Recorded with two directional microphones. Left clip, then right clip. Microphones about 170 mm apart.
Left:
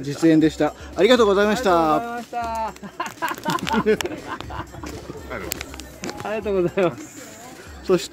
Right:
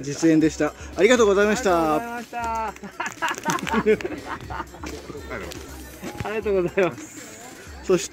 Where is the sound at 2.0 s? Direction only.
65° left (ahead or behind).